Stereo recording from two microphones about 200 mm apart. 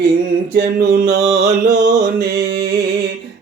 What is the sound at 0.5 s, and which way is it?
Mantra, 55° right (ahead or behind).